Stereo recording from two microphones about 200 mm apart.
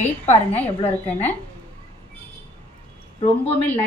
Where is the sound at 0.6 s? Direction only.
10° left (ahead or behind).